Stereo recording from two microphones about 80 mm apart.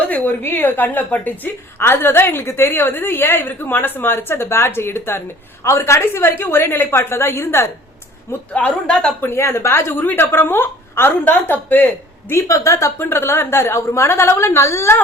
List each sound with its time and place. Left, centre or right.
0.0 s a woman's voice: left
8.5 s a woman's voice: centre
9.2 s a woman's voice: left
12.3 s a woman's voice: left